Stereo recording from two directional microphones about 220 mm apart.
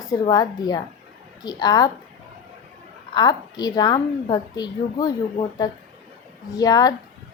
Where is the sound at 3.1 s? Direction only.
20° left (ahead or behind).